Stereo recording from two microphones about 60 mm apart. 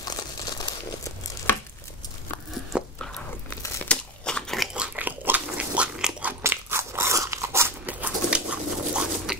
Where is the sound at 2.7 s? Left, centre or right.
Centre.